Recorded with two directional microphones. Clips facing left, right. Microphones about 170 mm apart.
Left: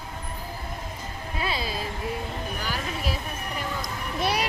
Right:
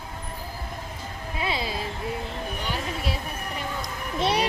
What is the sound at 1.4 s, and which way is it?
Speech, 25° right (ahead or behind).